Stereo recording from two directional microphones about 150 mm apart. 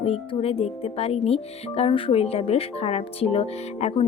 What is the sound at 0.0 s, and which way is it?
Speech, 40° left (ahead or behind).